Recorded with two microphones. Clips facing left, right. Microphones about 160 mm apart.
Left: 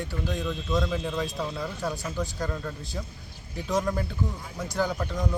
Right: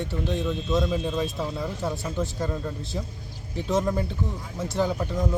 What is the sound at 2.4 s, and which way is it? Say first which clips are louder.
A man's voice: right 3 dB; 15° right (ahead or behind).